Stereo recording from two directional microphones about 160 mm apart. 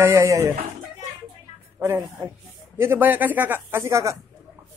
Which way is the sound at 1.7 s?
15° right (ahead or behind).